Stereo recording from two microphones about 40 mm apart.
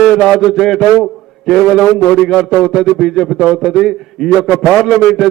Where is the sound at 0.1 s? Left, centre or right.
Centre.